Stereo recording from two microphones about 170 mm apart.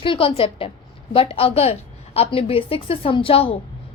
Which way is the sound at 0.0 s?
30° left (ahead or behind).